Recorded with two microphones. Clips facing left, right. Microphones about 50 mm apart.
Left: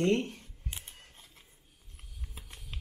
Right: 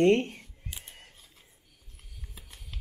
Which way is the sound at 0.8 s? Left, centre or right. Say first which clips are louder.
Right 2 dB; right.